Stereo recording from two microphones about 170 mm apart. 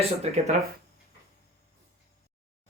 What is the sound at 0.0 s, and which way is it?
Speech, 40° right (ahead or behind).